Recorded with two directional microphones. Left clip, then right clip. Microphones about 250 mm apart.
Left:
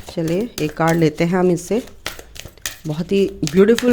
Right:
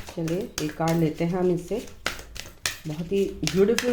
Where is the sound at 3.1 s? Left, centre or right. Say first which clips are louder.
Left 7 dB; left.